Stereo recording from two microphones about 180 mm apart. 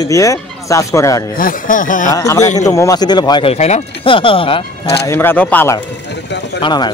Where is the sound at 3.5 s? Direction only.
35° left (ahead or behind).